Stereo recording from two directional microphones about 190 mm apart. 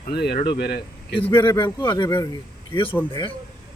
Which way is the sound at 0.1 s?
55° left (ahead or behind).